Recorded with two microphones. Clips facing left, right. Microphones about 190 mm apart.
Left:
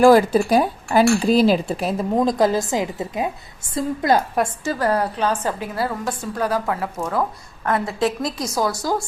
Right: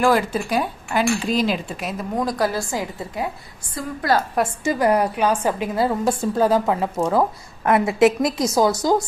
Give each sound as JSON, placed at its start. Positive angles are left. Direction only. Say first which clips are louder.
{"t": 0.0, "sound": "a woman's voice", "louder": "left 6 dB", "side_deg": 35}
{"t": 4.6, "sound": "a woman's voice", "louder": "right 5 dB", "side_deg": -15}